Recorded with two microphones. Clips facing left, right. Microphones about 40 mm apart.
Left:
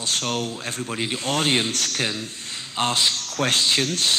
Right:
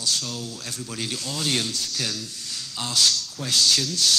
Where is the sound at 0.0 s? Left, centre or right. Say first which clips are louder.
Left 4 dB; left.